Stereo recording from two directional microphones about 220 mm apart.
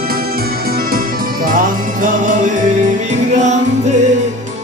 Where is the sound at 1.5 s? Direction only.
40° right (ahead or behind).